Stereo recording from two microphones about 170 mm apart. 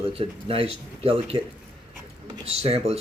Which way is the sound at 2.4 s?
35° right (ahead or behind).